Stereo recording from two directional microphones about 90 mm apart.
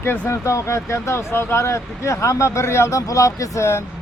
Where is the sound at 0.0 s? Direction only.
30° left (ahead or behind).